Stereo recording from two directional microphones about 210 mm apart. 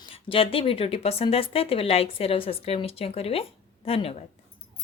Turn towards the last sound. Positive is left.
turn(degrees=30)  # may be behind; listen again after turning